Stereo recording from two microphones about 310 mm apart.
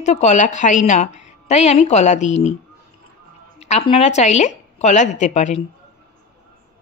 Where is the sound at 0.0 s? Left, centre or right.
Left.